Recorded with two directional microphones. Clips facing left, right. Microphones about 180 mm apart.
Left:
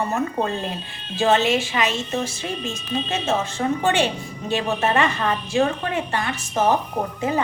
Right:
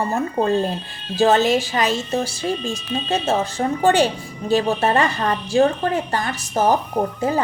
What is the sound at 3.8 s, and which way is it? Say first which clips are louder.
A woman's voice: right 8 dB; 40° right (ahead or behind).